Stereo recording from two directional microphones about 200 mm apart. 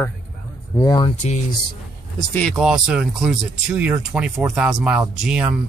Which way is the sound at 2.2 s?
10° left (ahead or behind).